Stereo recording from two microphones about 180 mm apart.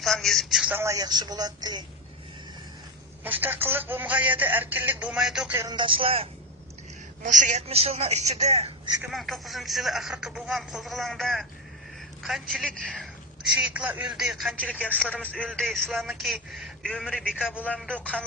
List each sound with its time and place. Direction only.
0.0 s speech: centre (ahead or behind); by 1.8 s 20° right (ahead or behind)
3.2 s speech: 10° right (ahead or behind)
5.5 s speech: 25° right (ahead or behind)
7.2 s a woman's voice: 45° right (ahead or behind)
9.0 s speech: centre (ahead or behind)
17.5 s speech: 10° left (ahead or behind)